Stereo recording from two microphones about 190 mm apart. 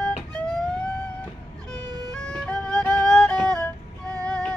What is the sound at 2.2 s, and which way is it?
Music, 5° left (ahead or behind).